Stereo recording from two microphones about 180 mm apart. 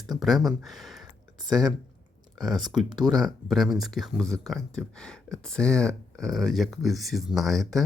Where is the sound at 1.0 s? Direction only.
20° right (ahead or behind).